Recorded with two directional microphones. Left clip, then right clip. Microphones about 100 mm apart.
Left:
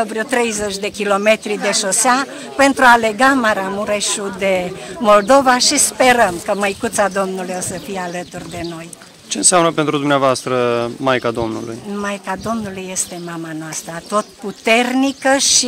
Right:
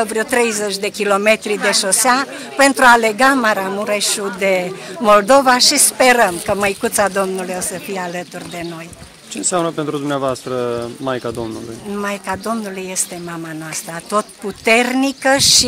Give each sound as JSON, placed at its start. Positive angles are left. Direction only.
{"t": 0.0, "sound": "speech", "side_deg": -20}
{"t": 0.3, "sound": "speech", "side_deg": -10}
{"t": 9.3, "sound": "speech", "side_deg": 20}
{"t": 11.9, "sound": "speech", "side_deg": -15}
{"t": 14.1, "sound": "speech", "side_deg": -10}